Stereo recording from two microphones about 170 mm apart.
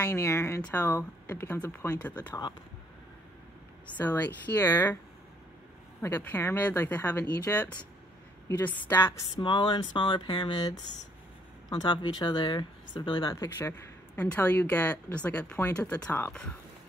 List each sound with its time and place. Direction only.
0.0 s speech: 15° left (ahead or behind)
4.0 s speech: 10° left (ahead or behind)
5.9 s speech: 10° left (ahead or behind)
9.4 s speech: 25° left (ahead or behind); by 16.5 s 5° left (ahead or behind)